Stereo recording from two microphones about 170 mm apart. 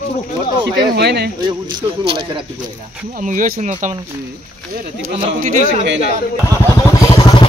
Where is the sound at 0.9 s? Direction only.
75° right (ahead or behind).